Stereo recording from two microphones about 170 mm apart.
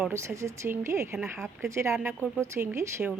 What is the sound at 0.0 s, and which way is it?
Speech, 15° right (ahead or behind).